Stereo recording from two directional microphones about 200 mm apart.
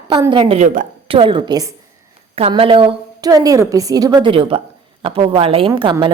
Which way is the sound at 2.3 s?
30° right (ahead or behind).